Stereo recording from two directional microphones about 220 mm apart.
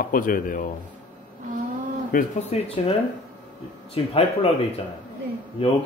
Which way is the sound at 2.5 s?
25° left (ahead or behind).